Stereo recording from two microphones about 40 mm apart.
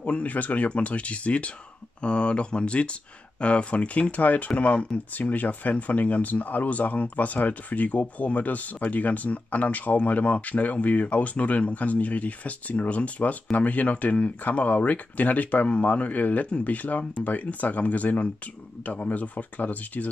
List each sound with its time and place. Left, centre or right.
0.0 s speech: left
4.2 s speech: left